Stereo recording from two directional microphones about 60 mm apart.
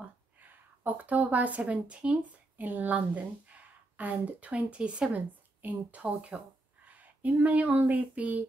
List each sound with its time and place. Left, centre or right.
0.4 s a woman's voice: right
7.0 s a sound: right
7.7 s speech: right